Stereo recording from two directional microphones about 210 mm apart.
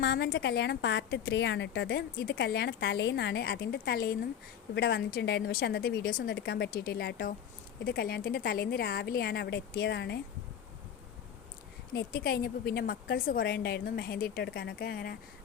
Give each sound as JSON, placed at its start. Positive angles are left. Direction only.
{"t": 0.0, "sound": "a woman's voice", "side_deg": 55}
{"t": 11.9, "sound": "a woman's voice", "side_deg": 45}